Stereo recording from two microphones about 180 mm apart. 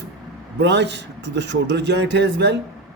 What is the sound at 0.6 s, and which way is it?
Speech, 75° right (ahead or behind).